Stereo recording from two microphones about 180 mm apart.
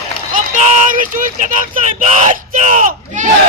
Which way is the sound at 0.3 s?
45° right (ahead or behind).